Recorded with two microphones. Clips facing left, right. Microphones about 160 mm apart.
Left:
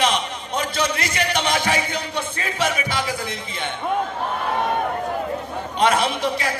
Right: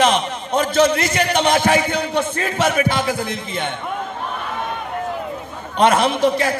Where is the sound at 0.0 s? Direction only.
50° right (ahead or behind).